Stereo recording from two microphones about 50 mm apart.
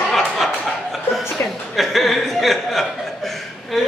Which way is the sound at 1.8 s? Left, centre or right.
Centre.